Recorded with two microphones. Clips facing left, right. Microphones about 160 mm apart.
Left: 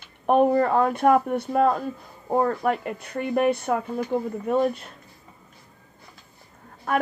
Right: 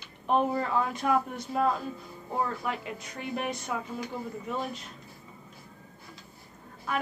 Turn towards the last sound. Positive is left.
turn(degrees=55)  # may be behind; listen again after turning